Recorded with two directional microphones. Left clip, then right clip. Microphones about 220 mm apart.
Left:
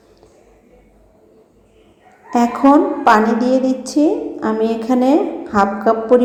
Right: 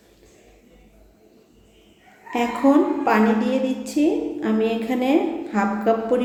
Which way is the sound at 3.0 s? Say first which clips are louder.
Left 7 dB; 20° left (ahead or behind).